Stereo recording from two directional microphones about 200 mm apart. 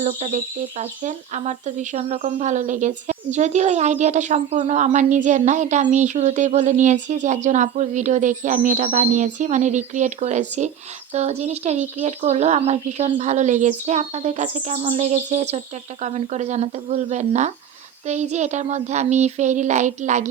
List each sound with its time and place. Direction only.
0.0 s speech: 40° right (ahead or behind)